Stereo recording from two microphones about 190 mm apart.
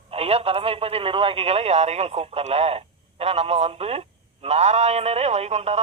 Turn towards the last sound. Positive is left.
turn(degrees=-35)  # may be behind; listen again after turning